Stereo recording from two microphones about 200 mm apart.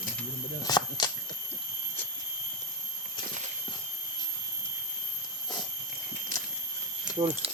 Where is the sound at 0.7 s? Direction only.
20° left (ahead or behind).